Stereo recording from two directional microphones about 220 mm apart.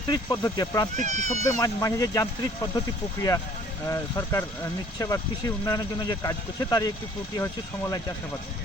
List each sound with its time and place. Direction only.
0.1 s speech: 15° left (ahead or behind)
0.9 s speech: 30° right (ahead or behind)
1.5 s speech: 15° left (ahead or behind)